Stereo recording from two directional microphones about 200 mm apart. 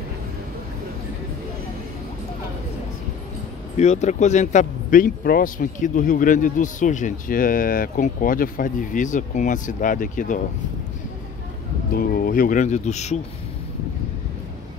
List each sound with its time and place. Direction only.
3.7 s speech: 35° left (ahead or behind)
11.9 s speech: 45° left (ahead or behind)